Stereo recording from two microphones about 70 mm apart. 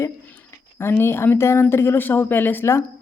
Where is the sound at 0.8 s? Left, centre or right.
Left.